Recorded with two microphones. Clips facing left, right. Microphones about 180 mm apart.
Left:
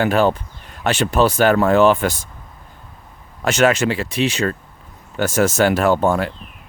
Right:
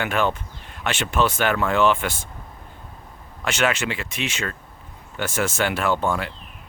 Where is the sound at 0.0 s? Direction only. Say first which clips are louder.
Left 7 dB; 35° left (ahead or behind).